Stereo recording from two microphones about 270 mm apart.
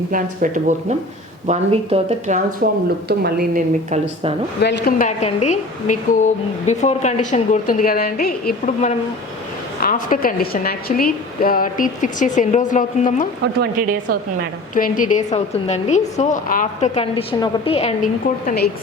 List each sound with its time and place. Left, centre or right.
0.1 s a woman's voice: right
4.6 s a woman's voice: left
14.1 s a woman's voice: right
14.8 s a woman's voice: left